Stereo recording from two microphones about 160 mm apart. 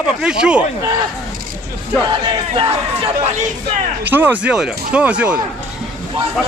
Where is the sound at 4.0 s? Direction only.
10° right (ahead or behind).